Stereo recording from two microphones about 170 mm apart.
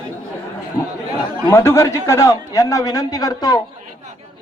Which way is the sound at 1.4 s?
15° left (ahead or behind).